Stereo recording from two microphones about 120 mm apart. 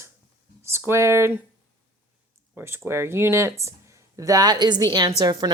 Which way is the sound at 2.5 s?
20° right (ahead or behind).